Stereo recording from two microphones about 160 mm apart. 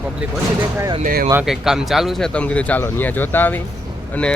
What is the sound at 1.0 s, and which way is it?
Speech, 65° right (ahead or behind).